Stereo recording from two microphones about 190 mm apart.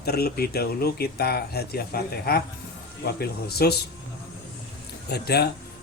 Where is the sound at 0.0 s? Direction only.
55° left (ahead or behind).